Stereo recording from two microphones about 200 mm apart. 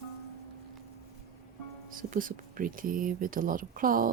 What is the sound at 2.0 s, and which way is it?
Speech, 45° right (ahead or behind).